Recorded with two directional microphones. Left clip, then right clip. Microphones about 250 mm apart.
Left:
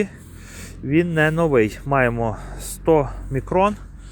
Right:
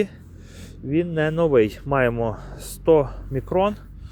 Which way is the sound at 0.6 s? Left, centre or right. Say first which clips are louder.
Left 4 dB; centre.